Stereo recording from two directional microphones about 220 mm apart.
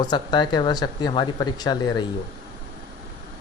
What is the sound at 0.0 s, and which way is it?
Speech, 20° left (ahead or behind).